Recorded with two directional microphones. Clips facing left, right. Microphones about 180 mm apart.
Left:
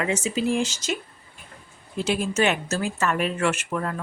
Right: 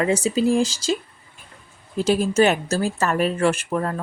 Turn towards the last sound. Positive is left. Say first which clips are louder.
# right 4 dB
turn(degrees=-35)  # may be behind; listen again after turning